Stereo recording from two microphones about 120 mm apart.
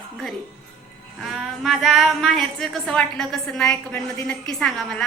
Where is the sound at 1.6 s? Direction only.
Centre (ahead or behind).